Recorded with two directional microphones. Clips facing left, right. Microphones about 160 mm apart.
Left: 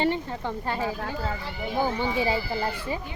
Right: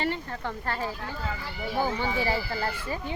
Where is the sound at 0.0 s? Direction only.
20° left (ahead or behind).